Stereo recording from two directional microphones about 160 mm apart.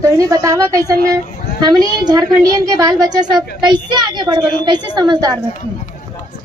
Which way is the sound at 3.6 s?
25° right (ahead or behind).